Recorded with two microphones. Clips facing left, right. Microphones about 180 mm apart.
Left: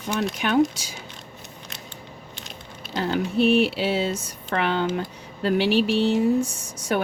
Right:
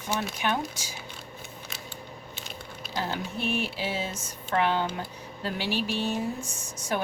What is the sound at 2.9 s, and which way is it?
Speech, 65° left (ahead or behind).